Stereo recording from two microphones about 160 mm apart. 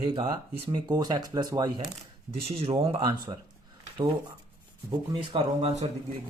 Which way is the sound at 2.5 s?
35° right (ahead or behind).